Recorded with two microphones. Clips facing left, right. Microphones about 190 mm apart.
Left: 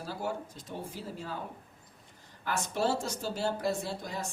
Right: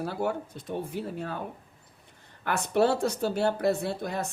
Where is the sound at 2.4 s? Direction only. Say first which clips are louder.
Right 6 dB; 60° right (ahead or behind).